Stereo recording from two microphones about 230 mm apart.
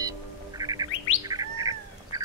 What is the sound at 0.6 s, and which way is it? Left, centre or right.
Bird, centre.